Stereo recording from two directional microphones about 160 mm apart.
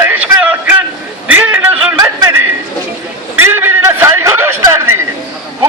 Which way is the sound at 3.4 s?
15° right (ahead or behind).